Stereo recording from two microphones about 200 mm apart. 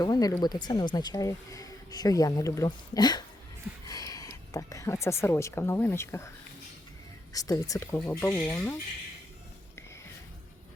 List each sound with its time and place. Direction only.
0.0 s speech: 20° left (ahead or behind)
7.3 s speech: 15° left (ahead or behind)